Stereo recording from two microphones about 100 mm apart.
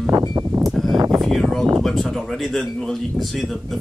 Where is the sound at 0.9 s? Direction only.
45° right (ahead or behind).